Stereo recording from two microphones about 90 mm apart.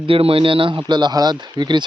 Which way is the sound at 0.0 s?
90° right.